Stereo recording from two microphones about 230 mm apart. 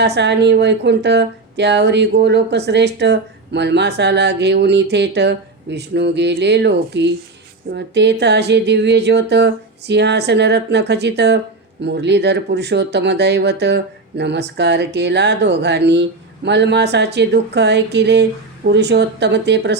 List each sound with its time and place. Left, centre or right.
0.0 s speech: right